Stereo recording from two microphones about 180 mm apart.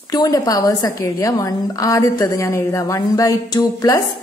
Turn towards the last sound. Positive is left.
turn(degrees=20)  # may be behind; listen again after turning